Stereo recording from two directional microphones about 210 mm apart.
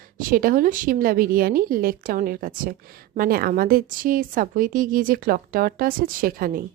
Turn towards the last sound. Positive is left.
turn(degrees=-45)  # may be behind; listen again after turning